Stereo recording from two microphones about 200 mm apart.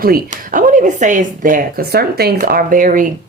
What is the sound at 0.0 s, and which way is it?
Speech, 45° right (ahead or behind).